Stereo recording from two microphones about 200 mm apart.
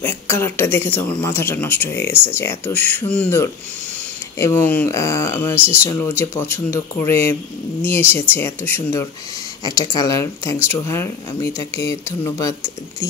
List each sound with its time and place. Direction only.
0.0 s speech: 10° left (ahead or behind)